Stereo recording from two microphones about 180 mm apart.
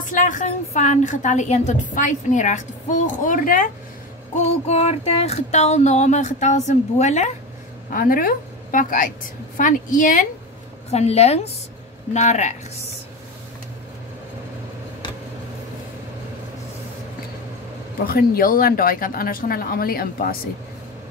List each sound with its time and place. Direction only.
0.0 s a woman's voice: 45° left (ahead or behind)
4.6 s speech: 35° left (ahead or behind)
7.9 s a woman's voice: 50° left (ahead or behind)
17.9 s a woman's voice: 55° left (ahead or behind)